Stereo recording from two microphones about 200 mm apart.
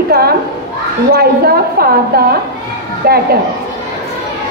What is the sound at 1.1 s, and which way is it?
A woman's voice, 50° right (ahead or behind).